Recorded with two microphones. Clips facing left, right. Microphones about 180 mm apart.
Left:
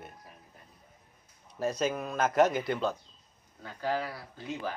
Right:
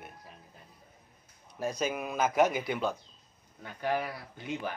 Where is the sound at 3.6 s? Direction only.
20° right (ahead or behind).